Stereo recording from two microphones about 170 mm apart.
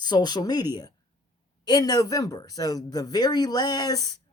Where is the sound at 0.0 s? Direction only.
25° left (ahead or behind).